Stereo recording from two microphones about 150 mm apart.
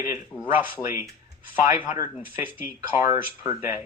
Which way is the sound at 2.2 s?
10° right (ahead or behind).